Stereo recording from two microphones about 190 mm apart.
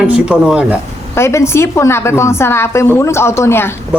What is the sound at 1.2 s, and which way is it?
A woman's voice, 15° left (ahead or behind).